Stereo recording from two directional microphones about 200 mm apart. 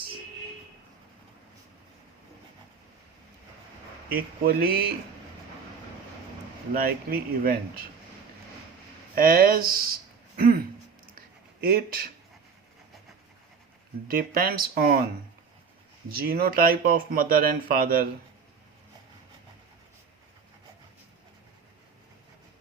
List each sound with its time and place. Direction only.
4.1 s speech: 45° right (ahead or behind)
6.7 s speech: 45° right (ahead or behind)
9.1 s speech: 45° right (ahead or behind)
11.6 s speech: 45° right (ahead or behind)
14.1 s speech: 45° right (ahead or behind)
16.0 s speech: 50° right (ahead or behind)